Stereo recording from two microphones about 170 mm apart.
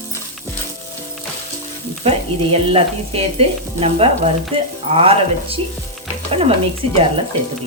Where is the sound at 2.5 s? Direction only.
35° right (ahead or behind).